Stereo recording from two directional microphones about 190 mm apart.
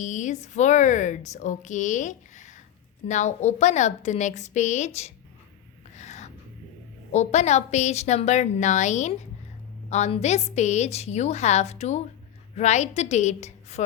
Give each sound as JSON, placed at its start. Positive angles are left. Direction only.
{"t": 0.0, "sound": "speech", "side_deg": 40}
{"t": 6.0, "sound": "a sound", "side_deg": 35}
{"t": 7.1, "sound": "speech", "side_deg": 35}